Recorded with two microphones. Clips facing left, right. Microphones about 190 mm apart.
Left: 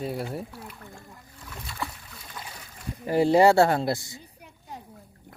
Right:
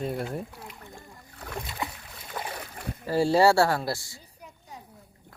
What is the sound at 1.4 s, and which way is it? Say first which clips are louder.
Boat: right 2 dB; 65° right (ahead or behind).